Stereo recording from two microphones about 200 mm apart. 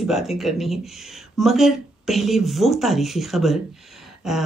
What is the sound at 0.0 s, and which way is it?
Speech, centre (ahead or behind).